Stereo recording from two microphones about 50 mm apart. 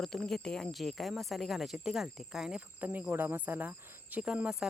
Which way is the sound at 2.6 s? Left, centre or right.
Right.